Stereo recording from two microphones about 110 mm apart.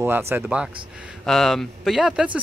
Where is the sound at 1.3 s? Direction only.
Centre (ahead or behind).